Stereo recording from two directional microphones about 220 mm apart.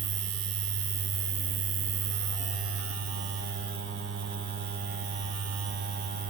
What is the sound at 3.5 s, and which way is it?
Mains hum, 50° right (ahead or behind).